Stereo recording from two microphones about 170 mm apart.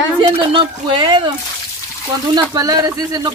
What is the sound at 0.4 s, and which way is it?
Speech, 30° right (ahead or behind).